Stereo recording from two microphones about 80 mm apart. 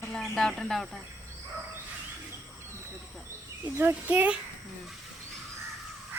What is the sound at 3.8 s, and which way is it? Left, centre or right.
Speech, right.